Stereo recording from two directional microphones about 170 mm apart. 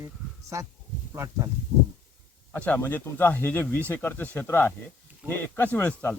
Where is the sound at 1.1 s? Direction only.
15° right (ahead or behind).